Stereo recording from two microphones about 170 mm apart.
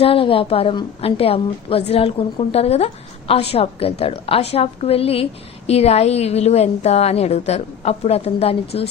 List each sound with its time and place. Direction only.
0.0 s a woman's voice: 30° left (ahead or behind)